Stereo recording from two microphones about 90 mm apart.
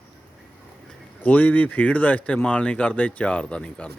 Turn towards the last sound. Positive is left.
turn(degrees=15)  # may be behind; listen again after turning